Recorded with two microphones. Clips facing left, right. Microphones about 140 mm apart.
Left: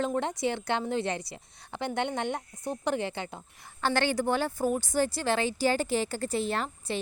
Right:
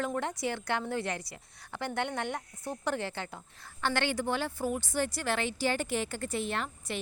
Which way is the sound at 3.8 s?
35° left (ahead or behind).